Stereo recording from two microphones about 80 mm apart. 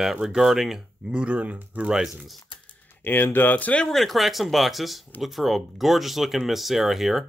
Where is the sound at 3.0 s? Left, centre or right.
Left.